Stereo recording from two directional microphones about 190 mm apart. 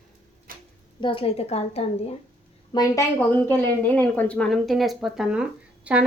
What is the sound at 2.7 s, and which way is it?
A woman's voice, 15° left (ahead or behind).